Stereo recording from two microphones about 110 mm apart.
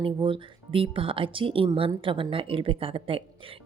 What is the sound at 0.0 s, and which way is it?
Speech, 50° right (ahead or behind).